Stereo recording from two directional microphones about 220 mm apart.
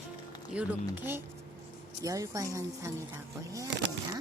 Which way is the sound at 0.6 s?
5° right (ahead or behind).